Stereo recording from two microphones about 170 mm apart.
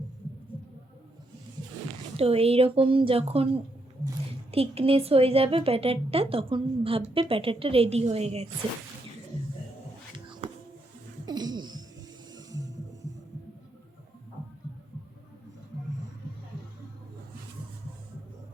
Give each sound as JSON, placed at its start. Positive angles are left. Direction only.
{"t": 2.1, "sound": "a woman's voice", "side_deg": -35}
{"t": 11.3, "sound": "a sound", "side_deg": -25}
{"t": 12.3, "sound": "music", "side_deg": -20}